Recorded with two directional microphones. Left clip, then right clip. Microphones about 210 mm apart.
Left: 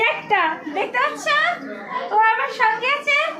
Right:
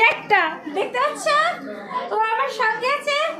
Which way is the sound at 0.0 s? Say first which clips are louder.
Right 2 dB; 15° right (ahead or behind).